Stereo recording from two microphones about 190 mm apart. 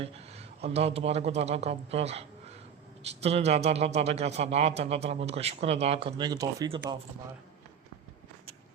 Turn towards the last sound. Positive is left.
turn(degrees=-20)  # may be behind; listen again after turning